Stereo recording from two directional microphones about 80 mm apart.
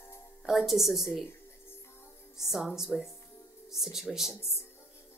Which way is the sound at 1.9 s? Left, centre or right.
Left.